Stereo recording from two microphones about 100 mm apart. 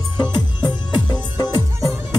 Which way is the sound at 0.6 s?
45° left (ahead or behind).